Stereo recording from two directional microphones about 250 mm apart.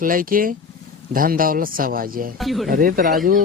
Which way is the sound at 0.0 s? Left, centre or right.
Right.